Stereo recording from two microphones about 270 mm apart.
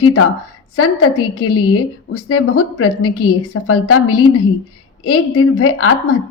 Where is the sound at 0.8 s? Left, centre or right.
Left.